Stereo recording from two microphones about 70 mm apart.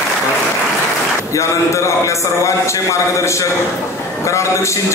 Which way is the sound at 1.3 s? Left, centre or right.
Left.